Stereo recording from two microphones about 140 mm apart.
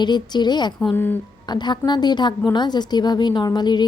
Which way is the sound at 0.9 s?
15° left (ahead or behind).